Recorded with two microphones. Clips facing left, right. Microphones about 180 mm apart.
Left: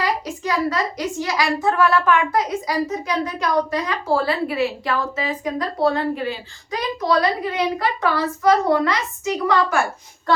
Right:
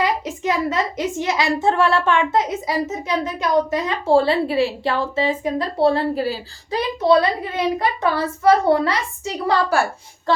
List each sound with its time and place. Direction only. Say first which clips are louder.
0.0 s a woman's voice: right 2 dB; 20° right (ahead or behind)